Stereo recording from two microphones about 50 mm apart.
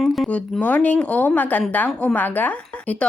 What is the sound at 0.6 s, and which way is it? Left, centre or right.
A woman's voice, left.